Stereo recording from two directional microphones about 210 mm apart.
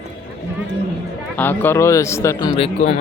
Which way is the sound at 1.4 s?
10° left (ahead or behind).